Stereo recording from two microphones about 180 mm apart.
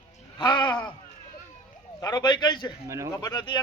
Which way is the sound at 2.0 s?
20° left (ahead or behind).